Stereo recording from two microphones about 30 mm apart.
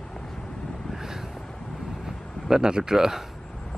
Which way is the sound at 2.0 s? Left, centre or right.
Right.